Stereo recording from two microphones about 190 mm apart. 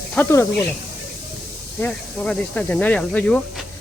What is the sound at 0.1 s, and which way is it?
Speech, 10° left (ahead or behind).